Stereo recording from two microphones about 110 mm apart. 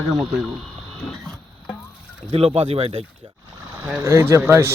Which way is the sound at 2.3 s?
65° right (ahead or behind).